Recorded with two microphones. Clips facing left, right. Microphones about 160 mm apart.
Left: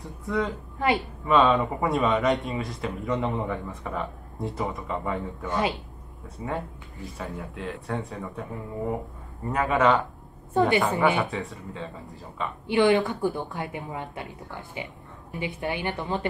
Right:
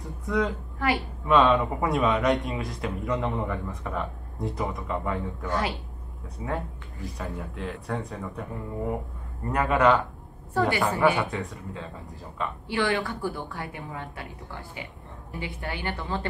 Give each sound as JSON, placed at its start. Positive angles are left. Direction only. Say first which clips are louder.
{"t": 0.0, "sound": "a sound", "louder": "right 1 dB", "side_deg": 0}
{"t": 0.7, "sound": "a woman's voice", "louder": "left 2 dB", "side_deg": 20}
{"t": 1.2, "sound": "speech", "louder": "even", "side_deg": 0}
{"t": 5.5, "sound": "a woman's voice", "louder": "left 2 dB", "side_deg": 20}
{"t": 6.3, "sound": "speech", "louder": "even", "side_deg": 0}
{"t": 10.5, "sound": "a woman's voice", "louder": "left 3 dB", "side_deg": 20}
{"t": 11.1, "sound": "speech", "louder": "left 1 dB", "side_deg": 0}
{"t": 12.6, "sound": "a woman's voice", "louder": "left 7 dB", "side_deg": 20}